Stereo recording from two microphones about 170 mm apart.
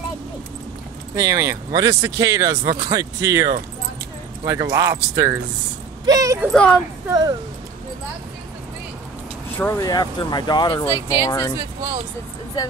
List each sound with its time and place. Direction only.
1.1 s speech: 20° right (ahead or behind)
6.4 s speech: 5° left (ahead or behind)
7.1 s speech: 25° right (ahead or behind)
9.6 s speech: 15° left (ahead or behind)
10.9 s speech: 15° right (ahead or behind)
11.2 s speech: 20° left (ahead or behind)